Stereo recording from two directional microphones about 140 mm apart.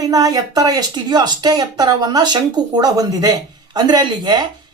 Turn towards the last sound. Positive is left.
turn(degrees=-30)  # may be behind; listen again after turning